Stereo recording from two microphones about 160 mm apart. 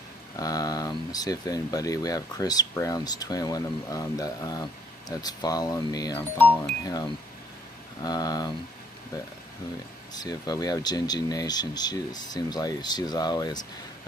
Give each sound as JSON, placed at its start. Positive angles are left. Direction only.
{"t": 0.4, "sound": "speech", "side_deg": 25}
{"t": 6.3, "sound": "speech", "side_deg": 10}
{"t": 6.8, "sound": "speech", "side_deg": 25}
{"t": 10.1, "sound": "speech", "side_deg": 25}